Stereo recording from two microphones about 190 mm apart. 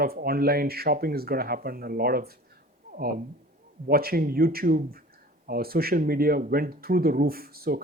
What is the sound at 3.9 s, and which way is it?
Speech, 50° right (ahead or behind).